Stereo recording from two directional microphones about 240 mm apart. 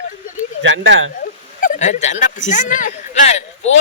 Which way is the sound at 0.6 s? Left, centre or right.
Right.